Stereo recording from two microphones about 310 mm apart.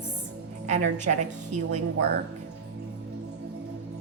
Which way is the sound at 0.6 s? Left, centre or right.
Right.